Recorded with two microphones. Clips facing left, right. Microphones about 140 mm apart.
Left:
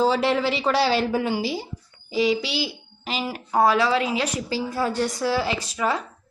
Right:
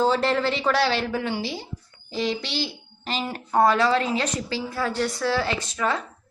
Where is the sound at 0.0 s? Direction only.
5° left (ahead or behind).